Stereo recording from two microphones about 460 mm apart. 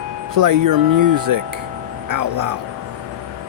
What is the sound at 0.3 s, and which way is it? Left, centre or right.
Speech, right.